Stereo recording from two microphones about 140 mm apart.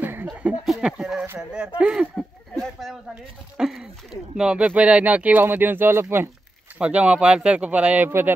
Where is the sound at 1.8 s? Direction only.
5° right (ahead or behind).